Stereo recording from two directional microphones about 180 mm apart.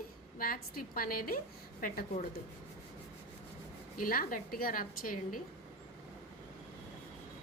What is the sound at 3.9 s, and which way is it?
A woman's voice, 50° left (ahead or behind).